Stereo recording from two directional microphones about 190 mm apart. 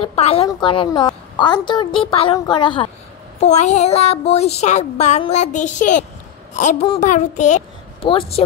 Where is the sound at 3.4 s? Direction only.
35° left (ahead or behind).